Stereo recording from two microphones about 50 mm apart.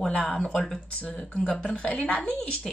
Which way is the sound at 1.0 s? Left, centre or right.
Left.